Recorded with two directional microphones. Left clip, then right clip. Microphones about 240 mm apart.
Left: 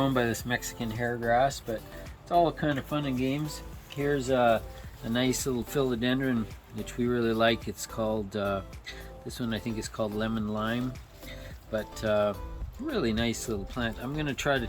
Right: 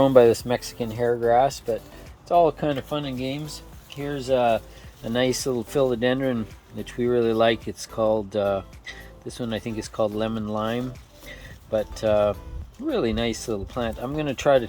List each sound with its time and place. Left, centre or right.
0.0 s speech: centre
2.9 s speech: centre
5.1 s speech: centre
11.3 s music: centre
12.9 s speech: centre